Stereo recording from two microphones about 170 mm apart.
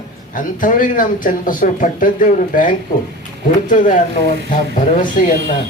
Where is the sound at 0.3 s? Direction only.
50° left (ahead or behind).